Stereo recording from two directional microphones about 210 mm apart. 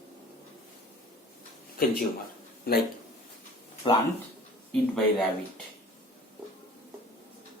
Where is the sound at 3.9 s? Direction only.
20° left (ahead or behind).